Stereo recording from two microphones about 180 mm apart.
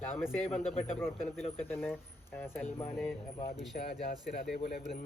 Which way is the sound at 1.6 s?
5° left (ahead or behind).